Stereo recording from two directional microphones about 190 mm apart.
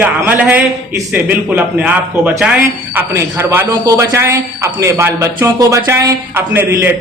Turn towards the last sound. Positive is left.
turn(degrees=-10)  # may be behind; listen again after turning